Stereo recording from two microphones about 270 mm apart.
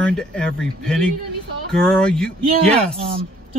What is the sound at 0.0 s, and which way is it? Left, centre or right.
Speech, centre.